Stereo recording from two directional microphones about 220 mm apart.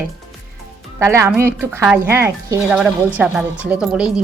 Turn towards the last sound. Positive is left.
turn(degrees=-5)  # may be behind; listen again after turning